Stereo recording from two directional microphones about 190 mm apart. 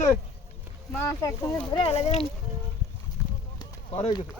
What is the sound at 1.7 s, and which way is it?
Speech, 30° left (ahead or behind).